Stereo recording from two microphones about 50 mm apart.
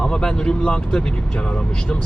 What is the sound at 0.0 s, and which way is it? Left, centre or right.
Speech, centre.